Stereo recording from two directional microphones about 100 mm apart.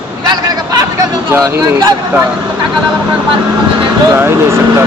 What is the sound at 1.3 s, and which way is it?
Speech, 25° right (ahead or behind).